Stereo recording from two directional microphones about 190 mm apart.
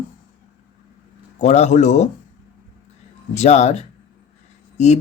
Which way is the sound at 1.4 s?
35° left (ahead or behind).